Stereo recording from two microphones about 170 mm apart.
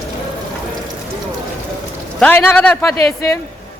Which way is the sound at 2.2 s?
10° left (ahead or behind).